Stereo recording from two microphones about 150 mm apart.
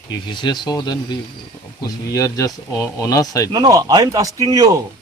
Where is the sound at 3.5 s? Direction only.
25° right (ahead or behind).